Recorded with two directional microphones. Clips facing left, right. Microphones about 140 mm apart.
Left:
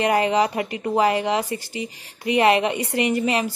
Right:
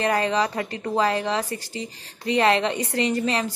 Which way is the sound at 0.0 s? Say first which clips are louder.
Left 3 dB; 15° left (ahead or behind).